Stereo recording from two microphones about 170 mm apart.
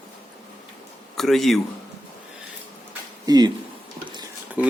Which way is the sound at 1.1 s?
Centre (ahead or behind).